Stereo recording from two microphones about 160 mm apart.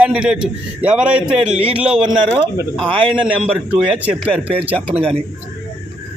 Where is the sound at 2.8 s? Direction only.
35° right (ahead or behind).